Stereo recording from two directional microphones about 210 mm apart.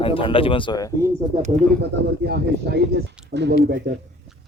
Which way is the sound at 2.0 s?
50° right (ahead or behind).